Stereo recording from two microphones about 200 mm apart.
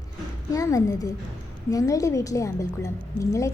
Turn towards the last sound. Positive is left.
turn(degrees=15)  # may be behind; listen again after turning